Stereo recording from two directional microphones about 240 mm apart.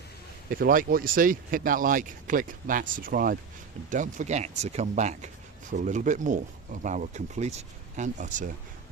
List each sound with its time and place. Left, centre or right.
0.5 s speech: right